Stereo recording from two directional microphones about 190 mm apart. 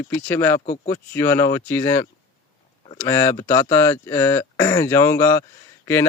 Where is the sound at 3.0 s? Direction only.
15° left (ahead or behind).